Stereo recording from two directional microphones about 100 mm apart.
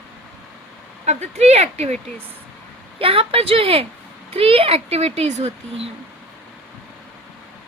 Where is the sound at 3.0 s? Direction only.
65° right (ahead or behind); by 5.9 s 90° right.